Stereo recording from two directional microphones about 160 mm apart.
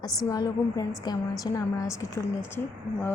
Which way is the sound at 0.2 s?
20° left (ahead or behind).